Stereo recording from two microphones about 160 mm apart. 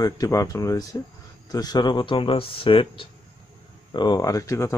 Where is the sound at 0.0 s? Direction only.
20° left (ahead or behind).